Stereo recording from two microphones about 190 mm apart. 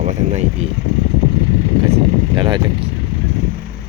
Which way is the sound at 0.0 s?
40° right (ahead or behind).